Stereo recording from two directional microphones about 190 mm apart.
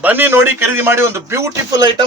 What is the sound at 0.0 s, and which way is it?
Speech, 10° right (ahead or behind).